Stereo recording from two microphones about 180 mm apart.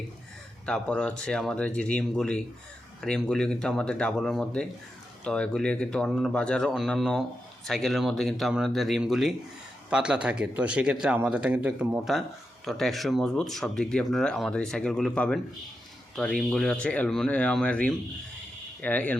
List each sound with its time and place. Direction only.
0.6 s speech: 5° left (ahead or behind)